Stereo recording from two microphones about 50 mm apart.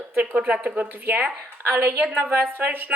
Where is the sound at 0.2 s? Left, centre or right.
Right.